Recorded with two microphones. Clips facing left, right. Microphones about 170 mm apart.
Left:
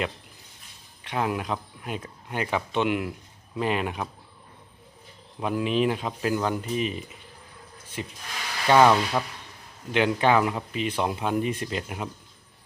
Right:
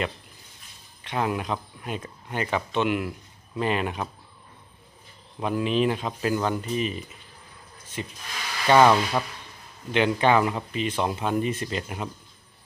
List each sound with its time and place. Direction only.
1.0 s speech: 5° left (ahead or behind)
5.4 s speech: 10° left (ahead or behind)